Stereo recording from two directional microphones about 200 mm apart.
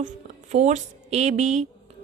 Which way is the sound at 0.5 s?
35° right (ahead or behind).